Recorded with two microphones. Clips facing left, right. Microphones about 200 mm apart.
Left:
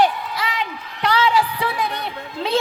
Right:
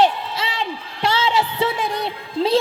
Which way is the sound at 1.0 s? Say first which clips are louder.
Left 1 dB; 25° right (ahead or behind).